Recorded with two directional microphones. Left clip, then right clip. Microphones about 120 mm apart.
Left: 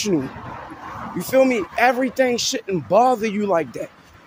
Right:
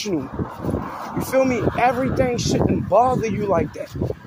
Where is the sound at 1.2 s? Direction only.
40° left (ahead or behind).